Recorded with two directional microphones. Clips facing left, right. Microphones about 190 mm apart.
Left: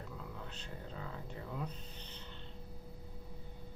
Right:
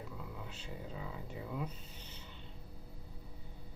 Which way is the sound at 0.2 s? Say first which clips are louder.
Even; 5° right (ahead or behind).